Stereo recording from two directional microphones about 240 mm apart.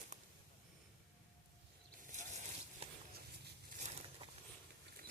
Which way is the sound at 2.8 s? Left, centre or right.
Right.